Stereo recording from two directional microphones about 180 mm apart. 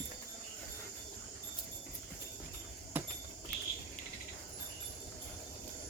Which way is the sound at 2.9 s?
10° right (ahead or behind).